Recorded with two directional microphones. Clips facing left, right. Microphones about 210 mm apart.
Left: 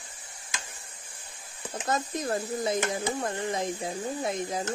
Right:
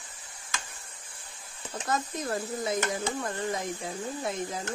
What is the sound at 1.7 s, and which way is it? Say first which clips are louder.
Speech: left 1 dB; 25° left (ahead or behind).